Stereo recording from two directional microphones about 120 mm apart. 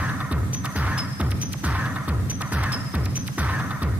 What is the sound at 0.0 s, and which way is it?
Music, 10° right (ahead or behind).